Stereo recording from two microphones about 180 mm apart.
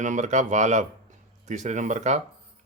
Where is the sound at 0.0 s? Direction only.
45° right (ahead or behind).